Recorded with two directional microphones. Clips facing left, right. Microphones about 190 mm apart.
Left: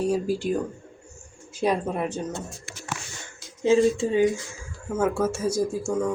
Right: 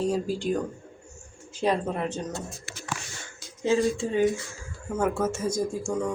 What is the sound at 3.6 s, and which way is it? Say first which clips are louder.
Speech: left 4 dB; 15° left (ahead or behind).